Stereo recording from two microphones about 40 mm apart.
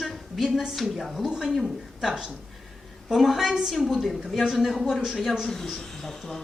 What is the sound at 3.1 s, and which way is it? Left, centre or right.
A woman's voice, centre.